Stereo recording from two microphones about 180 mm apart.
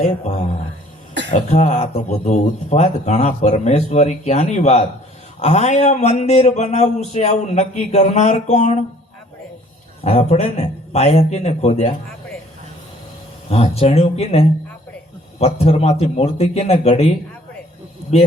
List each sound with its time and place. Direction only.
0.0 s speech: 45° left (ahead or behind)
10.0 s speech: 35° left (ahead or behind)
13.5 s speech: 35° left (ahead or behind)
18.1 s speech: 40° left (ahead or behind)